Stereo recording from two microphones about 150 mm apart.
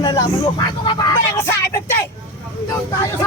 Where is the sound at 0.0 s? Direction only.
30° left (ahead or behind).